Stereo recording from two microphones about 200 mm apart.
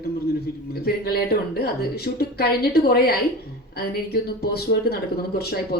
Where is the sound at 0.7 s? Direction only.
50° left (ahead or behind).